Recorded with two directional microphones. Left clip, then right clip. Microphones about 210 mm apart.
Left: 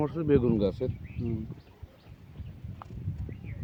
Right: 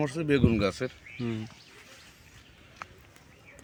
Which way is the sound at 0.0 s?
10° right (ahead or behind).